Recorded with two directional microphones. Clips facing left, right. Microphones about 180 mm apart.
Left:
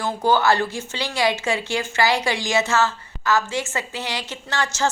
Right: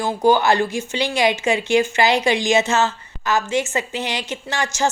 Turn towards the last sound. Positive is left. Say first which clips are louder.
# right 2 dB
turn(degrees=-15)  # may be behind; listen again after turning